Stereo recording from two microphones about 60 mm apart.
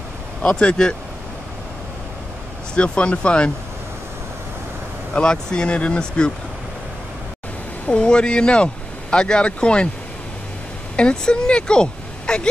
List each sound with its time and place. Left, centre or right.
0.4 s speech: centre
2.7 s speech: centre
5.1 s speech: centre
7.8 s speech: centre
11.0 s speech: centre